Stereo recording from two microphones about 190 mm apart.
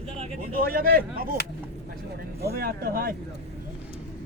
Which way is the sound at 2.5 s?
55° right (ahead or behind).